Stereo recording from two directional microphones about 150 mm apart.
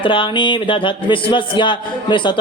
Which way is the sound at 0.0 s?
35° left (ahead or behind).